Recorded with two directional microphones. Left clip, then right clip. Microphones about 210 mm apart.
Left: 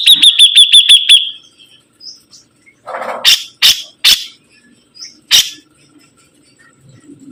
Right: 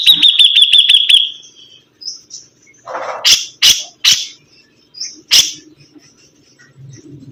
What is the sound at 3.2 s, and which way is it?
Bird, 25° left (ahead or behind).